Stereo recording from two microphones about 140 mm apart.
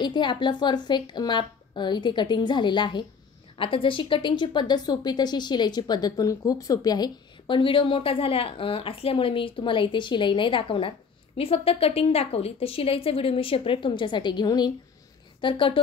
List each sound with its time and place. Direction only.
0.0 s a woman's voice: 35° left (ahead or behind)